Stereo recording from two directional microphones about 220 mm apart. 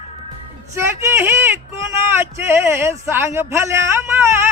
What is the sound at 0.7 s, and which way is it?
A man's voice, 10° right (ahead or behind).